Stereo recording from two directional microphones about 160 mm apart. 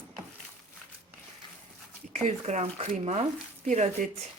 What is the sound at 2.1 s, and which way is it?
Speech, 45° right (ahead or behind).